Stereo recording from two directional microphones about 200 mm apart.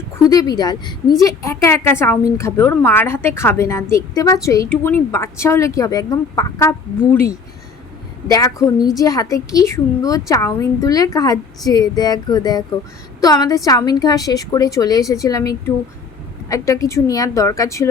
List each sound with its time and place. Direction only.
0.3 s a woman's voice: 20° left (ahead or behind)